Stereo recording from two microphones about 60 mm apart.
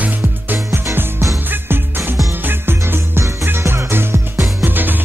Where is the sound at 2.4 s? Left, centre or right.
Right.